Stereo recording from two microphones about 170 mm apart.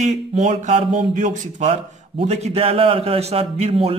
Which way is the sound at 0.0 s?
45° right (ahead or behind).